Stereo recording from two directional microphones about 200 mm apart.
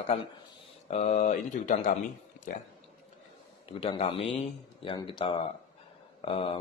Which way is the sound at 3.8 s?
25° left (ahead or behind).